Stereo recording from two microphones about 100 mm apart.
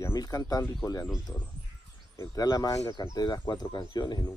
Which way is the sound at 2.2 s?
35° left (ahead or behind).